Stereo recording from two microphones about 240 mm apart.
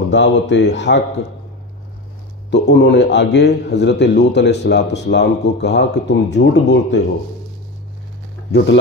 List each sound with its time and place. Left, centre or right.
0.1 s speech: left
2.5 s speech: left
8.5 s speech: left